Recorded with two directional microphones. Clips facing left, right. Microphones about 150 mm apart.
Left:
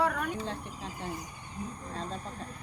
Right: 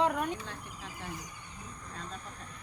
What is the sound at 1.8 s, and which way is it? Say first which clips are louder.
Speech: left 3 dB; 35° left (ahead or behind).